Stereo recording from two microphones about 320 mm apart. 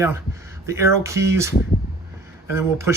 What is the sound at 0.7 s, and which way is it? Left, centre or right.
Speech, centre.